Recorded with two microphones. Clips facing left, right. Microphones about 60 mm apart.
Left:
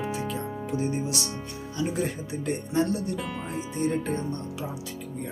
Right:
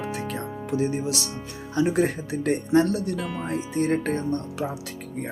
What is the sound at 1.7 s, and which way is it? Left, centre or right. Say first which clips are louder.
Speech: right 7 dB; right.